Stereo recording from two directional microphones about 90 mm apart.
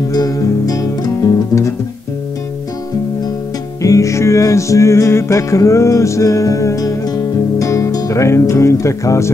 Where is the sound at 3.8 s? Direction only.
35° left (ahead or behind).